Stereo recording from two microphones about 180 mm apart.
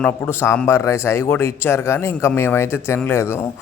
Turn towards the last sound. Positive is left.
turn(degrees=15)  # may be behind; listen again after turning